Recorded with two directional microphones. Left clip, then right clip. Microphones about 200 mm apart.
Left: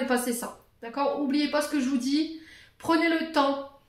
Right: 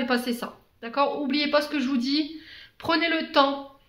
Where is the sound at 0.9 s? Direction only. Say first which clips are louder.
Right 2 dB; 35° right (ahead or behind).